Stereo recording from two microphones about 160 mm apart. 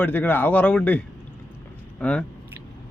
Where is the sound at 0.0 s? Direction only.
10° left (ahead or behind).